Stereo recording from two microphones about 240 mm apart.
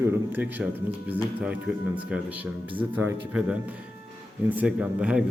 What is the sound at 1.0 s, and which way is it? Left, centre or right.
Speech, centre.